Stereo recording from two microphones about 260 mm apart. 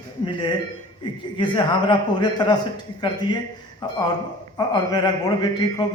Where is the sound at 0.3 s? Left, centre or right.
Centre.